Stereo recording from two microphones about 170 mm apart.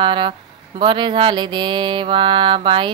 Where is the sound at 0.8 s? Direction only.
25° right (ahead or behind).